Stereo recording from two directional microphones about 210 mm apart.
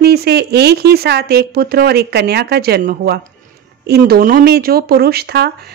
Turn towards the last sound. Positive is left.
turn(degrees=-50)  # may be behind; listen again after turning